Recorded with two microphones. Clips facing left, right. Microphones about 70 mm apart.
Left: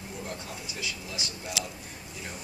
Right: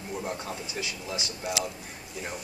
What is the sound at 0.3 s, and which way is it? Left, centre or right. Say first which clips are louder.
A man's voice: right 4 dB; right.